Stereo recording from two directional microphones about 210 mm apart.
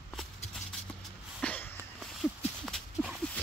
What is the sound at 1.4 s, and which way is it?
Sniff, 5° left (ahead or behind).